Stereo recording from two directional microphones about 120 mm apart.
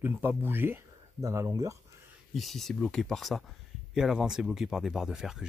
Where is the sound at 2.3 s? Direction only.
Centre (ahead or behind).